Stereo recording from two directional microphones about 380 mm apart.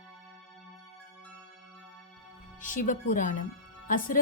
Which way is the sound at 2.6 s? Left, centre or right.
Centre.